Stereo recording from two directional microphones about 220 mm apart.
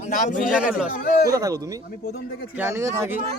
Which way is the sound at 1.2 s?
15° right (ahead or behind).